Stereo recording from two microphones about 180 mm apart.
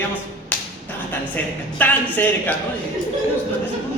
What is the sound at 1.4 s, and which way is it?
A man's voice, 10° left (ahead or behind).